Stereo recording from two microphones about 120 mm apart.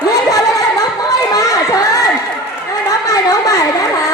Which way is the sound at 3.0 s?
30° left (ahead or behind).